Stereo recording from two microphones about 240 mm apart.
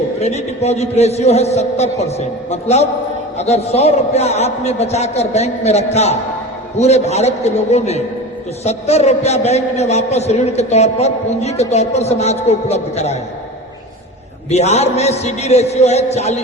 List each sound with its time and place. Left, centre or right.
0.2 s a man's voice: left
14.5 s a man's voice: left